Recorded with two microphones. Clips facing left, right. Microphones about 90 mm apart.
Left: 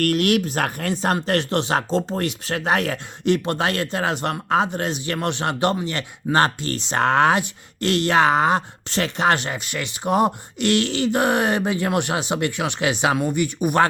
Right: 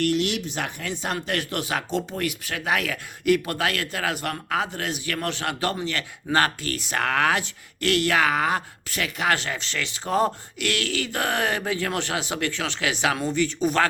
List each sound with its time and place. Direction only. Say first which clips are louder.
0.0 s speech: left 5 dB; 50° left (ahead or behind); by 13.8 s 15° left (ahead or behind)